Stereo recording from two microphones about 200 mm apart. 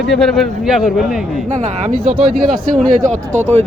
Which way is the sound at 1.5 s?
35° right (ahead or behind).